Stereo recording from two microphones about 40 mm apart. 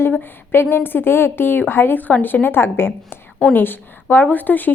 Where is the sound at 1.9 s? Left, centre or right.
Left.